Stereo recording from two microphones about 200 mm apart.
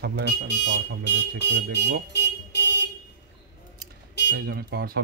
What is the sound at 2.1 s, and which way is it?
Car alarm, 55° left (ahead or behind).